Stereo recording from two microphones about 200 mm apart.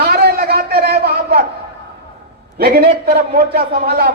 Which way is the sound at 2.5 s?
50° right (ahead or behind).